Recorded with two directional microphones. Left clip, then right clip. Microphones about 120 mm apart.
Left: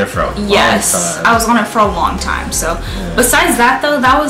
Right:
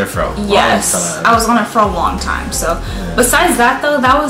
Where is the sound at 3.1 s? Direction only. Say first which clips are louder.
Even; 5° left (ahead or behind).